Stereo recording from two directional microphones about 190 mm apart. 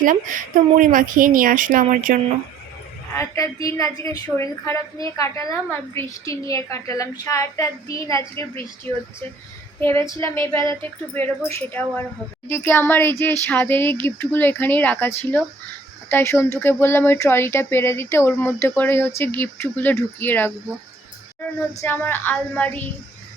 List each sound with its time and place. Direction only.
0.0 s a woman's voice: 45° right (ahead or behind)
3.2 s speech: 15° left (ahead or behind)
10.1 s speech: 15° left (ahead or behind)
21.8 s speech: 10° left (ahead or behind)